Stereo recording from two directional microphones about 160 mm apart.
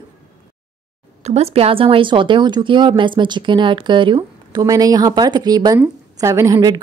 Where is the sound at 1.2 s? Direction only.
40° right (ahead or behind); by 6.8 s 25° right (ahead or behind).